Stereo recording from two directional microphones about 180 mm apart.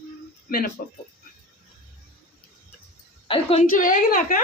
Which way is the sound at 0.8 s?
50° left (ahead or behind).